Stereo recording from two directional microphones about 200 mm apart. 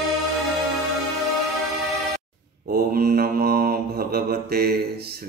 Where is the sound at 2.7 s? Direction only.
50° right (ahead or behind).